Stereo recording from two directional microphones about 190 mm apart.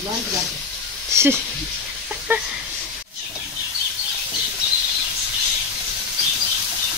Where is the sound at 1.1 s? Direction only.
15° right (ahead or behind).